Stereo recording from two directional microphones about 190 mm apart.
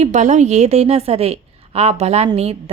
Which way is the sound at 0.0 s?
40° right (ahead or behind).